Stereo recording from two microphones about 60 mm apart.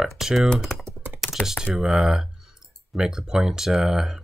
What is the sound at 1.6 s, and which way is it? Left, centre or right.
Speech, centre.